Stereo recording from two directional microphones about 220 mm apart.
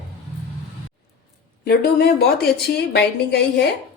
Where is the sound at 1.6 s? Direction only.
45° left (ahead or behind).